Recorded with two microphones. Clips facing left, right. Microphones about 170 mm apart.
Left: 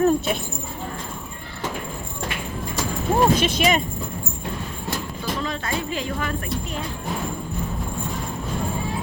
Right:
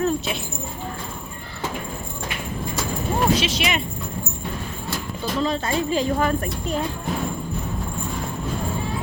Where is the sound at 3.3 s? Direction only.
50° left (ahead or behind).